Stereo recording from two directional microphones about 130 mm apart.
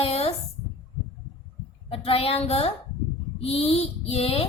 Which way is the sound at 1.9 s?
45° left (ahead or behind).